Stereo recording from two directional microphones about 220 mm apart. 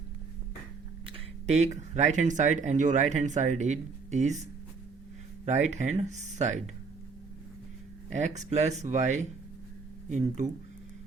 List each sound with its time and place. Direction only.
1.0 s speech: 30° right (ahead or behind)
5.5 s speech: 30° right (ahead or behind)
8.1 s speech: 30° right (ahead or behind)